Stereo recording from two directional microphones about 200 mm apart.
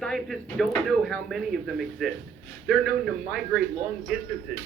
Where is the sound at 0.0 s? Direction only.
Centre (ahead or behind).